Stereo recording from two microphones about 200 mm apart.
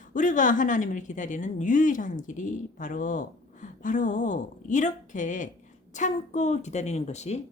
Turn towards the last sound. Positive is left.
turn(degrees=35)  # may be behind; listen again after turning